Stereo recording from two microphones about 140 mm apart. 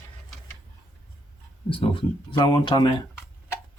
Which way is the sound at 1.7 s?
40° left (ahead or behind).